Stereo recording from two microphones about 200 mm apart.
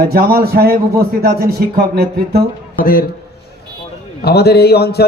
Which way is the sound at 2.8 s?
45° left (ahead or behind).